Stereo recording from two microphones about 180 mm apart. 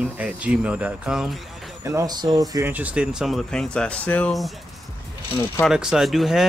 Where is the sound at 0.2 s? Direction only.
5° right (ahead or behind).